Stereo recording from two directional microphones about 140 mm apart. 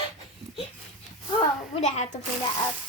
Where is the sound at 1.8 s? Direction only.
50° left (ahead or behind).